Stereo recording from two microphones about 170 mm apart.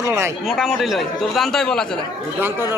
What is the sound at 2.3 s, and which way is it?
Speech, 10° right (ahead or behind).